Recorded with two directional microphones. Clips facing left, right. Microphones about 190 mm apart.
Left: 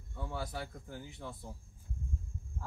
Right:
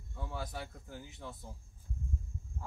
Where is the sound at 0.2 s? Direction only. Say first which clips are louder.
Left 2 dB; centre (ahead or behind).